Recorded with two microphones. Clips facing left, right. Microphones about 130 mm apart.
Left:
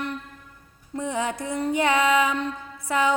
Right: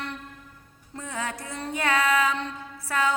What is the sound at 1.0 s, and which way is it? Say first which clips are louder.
Music: left 6 dB; 20° left (ahead or behind).